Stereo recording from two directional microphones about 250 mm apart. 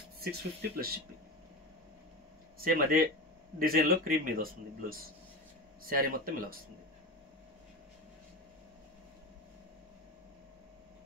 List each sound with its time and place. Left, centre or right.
0.2 s speech: right
2.6 s speech: right